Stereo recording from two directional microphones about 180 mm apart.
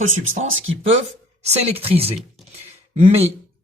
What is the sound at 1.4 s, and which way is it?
Speech, 35° right (ahead or behind).